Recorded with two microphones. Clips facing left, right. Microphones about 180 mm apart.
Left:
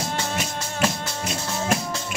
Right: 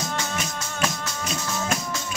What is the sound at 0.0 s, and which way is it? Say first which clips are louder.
Music: left 2 dB; 30° left (ahead or behind).